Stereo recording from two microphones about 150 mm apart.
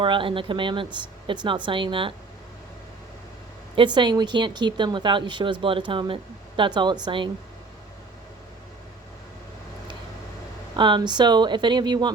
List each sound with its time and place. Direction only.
0.0 s speech: 35° right (ahead or behind)
3.8 s speech: 30° right (ahead or behind)
10.8 s speech: 30° right (ahead or behind)